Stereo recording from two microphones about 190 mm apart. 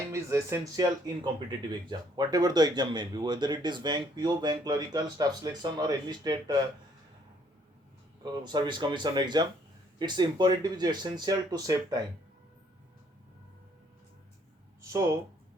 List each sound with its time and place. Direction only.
0.1 s speech: 15° right (ahead or behind)
8.2 s speech: 20° right (ahead or behind)